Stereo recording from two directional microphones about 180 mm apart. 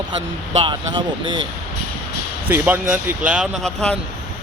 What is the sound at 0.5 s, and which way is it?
Speech, 30° right (ahead or behind).